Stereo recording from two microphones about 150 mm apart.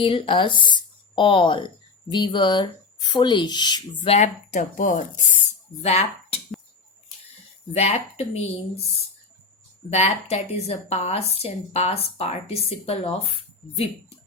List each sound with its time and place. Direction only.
0.0 s speech: 35° left (ahead or behind)
4.1 s speech: 50° left (ahead or behind)
5.8 s speech: 45° left (ahead or behind)
7.7 s a woman's voice: 45° left (ahead or behind)
9.9 s a woman's voice: 45° left (ahead or behind)